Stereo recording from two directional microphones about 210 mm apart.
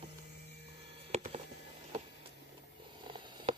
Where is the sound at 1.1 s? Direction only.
30° right (ahead or behind).